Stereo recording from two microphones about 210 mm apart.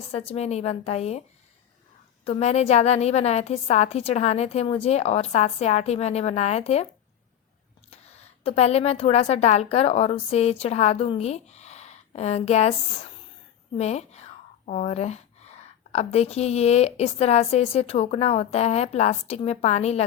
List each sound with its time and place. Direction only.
0.1 s speech: 30° left (ahead or behind)
2.2 s speech: 30° left (ahead or behind)
7.9 s a woman's voice: 30° left (ahead or behind)
13.7 s speech: 30° left (ahead or behind)